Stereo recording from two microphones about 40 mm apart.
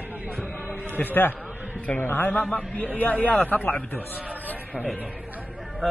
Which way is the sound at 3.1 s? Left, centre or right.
Left.